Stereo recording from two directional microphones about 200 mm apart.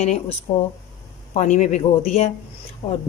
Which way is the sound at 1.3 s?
35° left (ahead or behind).